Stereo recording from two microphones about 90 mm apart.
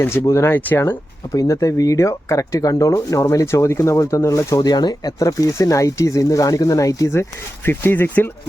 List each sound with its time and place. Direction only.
0.0 s speech: 20° left (ahead or behind)
0.3 s speech: 35° left (ahead or behind)
4.6 s speech: 50° left (ahead or behind); by 8.3 s 20° left (ahead or behind)